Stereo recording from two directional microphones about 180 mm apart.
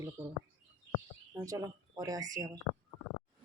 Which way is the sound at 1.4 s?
20° right (ahead or behind).